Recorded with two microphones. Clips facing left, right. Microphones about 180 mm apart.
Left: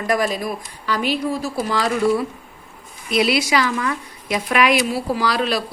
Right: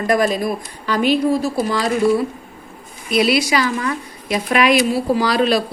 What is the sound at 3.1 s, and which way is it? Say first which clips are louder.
Speech: right 2 dB; 20° left (ahead or behind).